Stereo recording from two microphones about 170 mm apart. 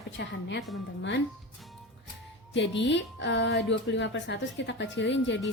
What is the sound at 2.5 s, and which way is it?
Speech, 90° left.